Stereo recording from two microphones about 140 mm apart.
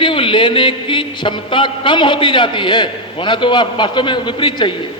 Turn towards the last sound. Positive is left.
turn(degrees=35)  # may be behind; listen again after turning